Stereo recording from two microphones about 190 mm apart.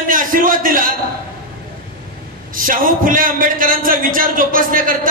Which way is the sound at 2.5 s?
45° right (ahead or behind).